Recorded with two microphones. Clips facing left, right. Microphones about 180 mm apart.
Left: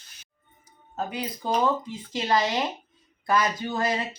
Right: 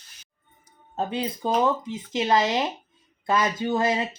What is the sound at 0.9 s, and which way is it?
Speech, 25° right (ahead or behind).